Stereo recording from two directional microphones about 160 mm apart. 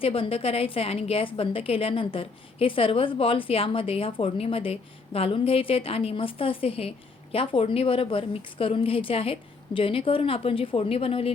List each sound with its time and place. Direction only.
0.0 s a woman's voice: 35° left (ahead or behind)